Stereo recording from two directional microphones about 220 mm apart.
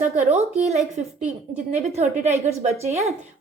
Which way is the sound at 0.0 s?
30° right (ahead or behind).